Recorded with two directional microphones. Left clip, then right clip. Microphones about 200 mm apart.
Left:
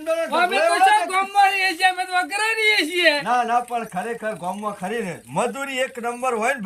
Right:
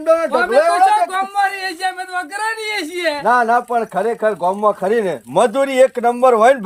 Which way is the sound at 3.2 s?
25° right (ahead or behind).